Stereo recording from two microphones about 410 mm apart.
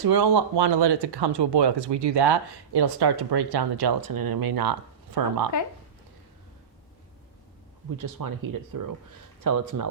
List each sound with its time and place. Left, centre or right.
0.0 s speech: right
8.0 s speech: right